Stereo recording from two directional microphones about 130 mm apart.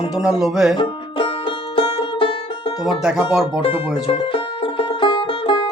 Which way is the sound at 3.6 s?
45° left (ahead or behind).